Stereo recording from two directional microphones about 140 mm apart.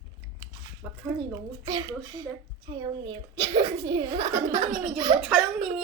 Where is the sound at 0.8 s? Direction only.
10° right (ahead or behind).